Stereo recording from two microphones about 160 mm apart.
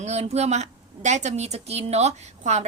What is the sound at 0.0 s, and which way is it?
A woman's voice, 45° right (ahead or behind).